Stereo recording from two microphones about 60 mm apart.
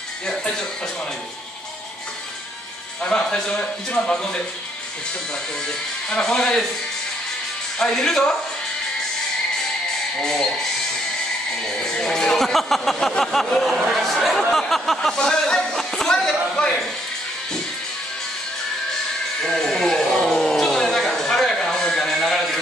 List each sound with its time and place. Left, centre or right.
3.0 s speech: centre
6.0 s speech: centre
7.8 s speech: centre
10.1 s speech: centre
19.4 s a sound: centre